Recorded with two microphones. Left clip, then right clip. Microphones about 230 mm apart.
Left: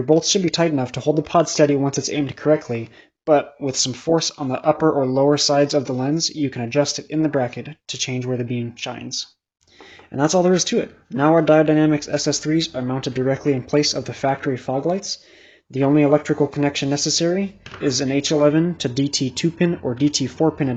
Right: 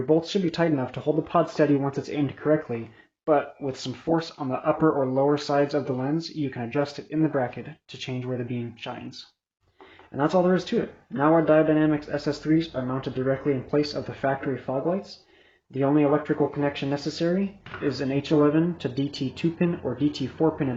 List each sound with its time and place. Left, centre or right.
0.1 s speech: left
10.4 s speech: left